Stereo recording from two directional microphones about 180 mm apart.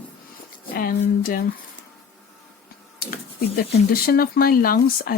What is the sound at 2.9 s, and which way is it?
Speech, 55° left (ahead or behind).